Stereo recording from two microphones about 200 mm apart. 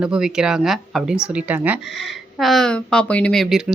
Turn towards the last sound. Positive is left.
turn(degrees=0)  # may be behind; listen again after turning